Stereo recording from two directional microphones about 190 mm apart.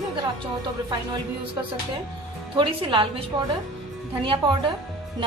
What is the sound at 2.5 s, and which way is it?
Speech, 25° right (ahead or behind).